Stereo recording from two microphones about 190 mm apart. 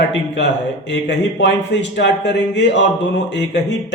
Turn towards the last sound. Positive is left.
turn(degrees=70)  # may be behind; listen again after turning